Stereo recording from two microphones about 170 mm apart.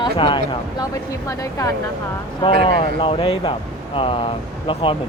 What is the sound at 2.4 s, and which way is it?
Speech, 30° left (ahead or behind).